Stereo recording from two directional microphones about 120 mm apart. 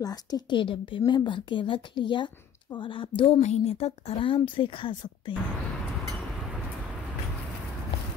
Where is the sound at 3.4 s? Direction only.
65° left (ahead or behind); by 5.3 s 45° left (ahead or behind).